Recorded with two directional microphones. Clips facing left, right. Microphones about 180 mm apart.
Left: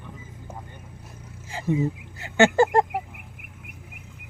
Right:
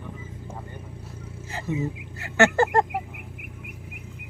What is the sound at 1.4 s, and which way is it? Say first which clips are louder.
Speech: left 4 dB; 10° left (ahead or behind).